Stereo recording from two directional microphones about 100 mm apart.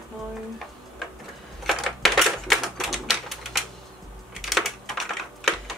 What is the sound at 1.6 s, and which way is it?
Typewriter, centre (ahead or behind).